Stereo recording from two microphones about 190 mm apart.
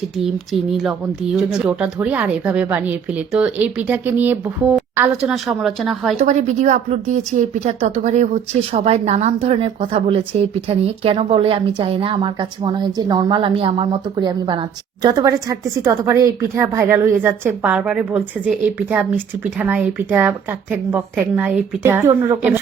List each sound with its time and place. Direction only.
0.8 s a woman's voice: centre (ahead or behind)
6.1 s a woman's voice: 40° right (ahead or behind); by 22.5 s 10° right (ahead or behind)